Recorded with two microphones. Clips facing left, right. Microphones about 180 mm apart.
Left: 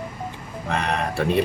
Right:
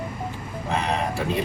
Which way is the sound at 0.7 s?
65° left (ahead or behind).